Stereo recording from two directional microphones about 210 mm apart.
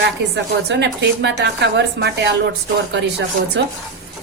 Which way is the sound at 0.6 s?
55° right (ahead or behind).